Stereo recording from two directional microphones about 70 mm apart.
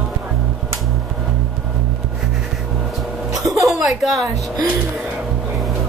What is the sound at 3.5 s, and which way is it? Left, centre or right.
Music, centre.